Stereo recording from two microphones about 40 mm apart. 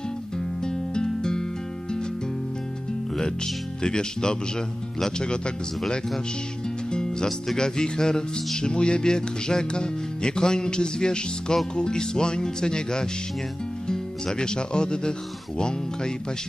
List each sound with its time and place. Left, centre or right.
0.6 s music: centre
3.2 s speech: centre
6.9 s music: centre
7.5 s speech: centre
8.5 s music: left
13.8 s speech: centre
15.5 s music: centre